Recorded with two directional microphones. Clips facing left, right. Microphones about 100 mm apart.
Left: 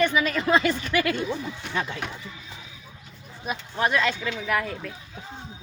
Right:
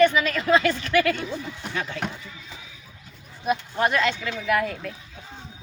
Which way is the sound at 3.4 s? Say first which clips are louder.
Right 3 dB; centre (ahead or behind).